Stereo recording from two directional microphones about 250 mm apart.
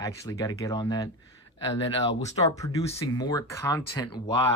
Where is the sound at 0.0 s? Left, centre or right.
Centre.